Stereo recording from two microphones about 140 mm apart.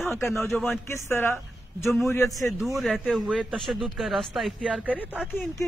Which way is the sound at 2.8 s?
Centre (ahead or behind).